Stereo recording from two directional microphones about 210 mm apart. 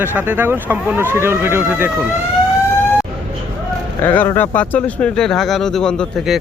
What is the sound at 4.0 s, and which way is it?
Speech, 10° left (ahead or behind).